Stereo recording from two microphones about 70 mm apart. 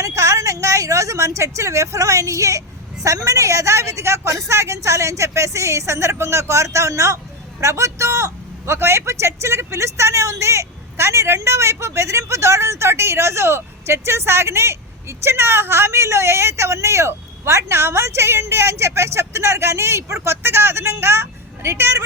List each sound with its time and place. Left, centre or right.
0.0 s a woman's voice: right